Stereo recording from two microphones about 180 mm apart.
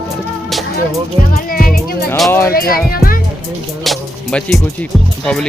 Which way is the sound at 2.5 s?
55° left (ahead or behind).